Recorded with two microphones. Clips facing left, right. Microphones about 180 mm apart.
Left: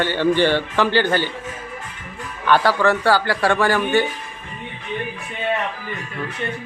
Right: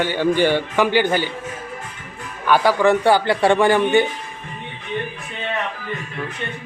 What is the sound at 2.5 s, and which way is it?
A man's voice, 15° right (ahead or behind).